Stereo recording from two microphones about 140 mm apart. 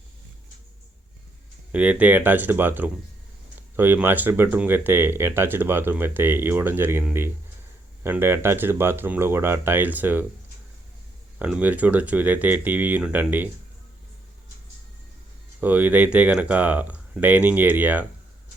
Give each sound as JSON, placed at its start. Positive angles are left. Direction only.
{"t": 1.7, "sound": "speech", "side_deg": -10}
{"t": 11.3, "sound": "speech", "side_deg": -10}
{"t": 15.6, "sound": "speech", "side_deg": -10}